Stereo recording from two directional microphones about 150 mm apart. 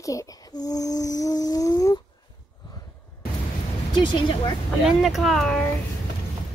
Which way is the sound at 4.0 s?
35° left (ahead or behind).